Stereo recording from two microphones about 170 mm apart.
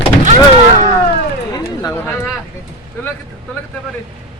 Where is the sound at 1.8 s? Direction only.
15° left (ahead or behind).